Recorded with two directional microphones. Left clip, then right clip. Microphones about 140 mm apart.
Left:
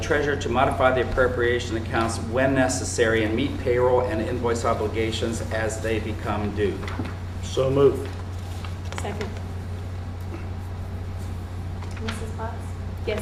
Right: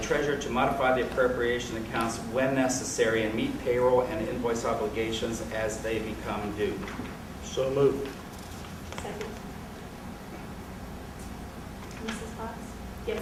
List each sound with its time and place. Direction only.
0.0 s a man's voice: 45° left (ahead or behind)
3.0 s a man's voice: 45° left (ahead or behind)
13.1 s a woman's voice: 25° left (ahead or behind)